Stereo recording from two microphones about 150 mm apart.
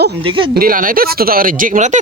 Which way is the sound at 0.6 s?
65° right (ahead or behind).